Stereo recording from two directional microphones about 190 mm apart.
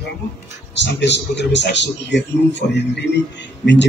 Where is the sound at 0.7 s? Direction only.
65° left (ahead or behind).